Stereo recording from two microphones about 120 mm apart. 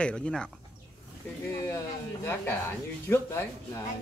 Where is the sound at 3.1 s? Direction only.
20° left (ahead or behind).